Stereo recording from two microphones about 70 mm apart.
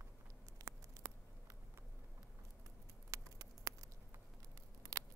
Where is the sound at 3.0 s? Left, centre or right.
Right.